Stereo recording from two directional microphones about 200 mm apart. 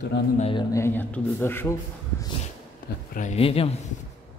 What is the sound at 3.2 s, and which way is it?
Speech, 30° left (ahead or behind).